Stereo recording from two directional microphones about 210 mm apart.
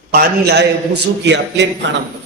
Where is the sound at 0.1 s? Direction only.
45° right (ahead or behind).